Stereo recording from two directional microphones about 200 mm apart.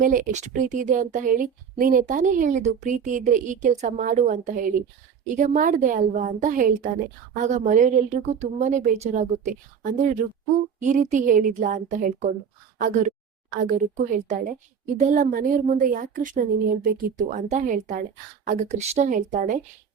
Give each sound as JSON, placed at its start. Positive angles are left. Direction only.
{"t": 0.0, "sound": "speech", "side_deg": -40}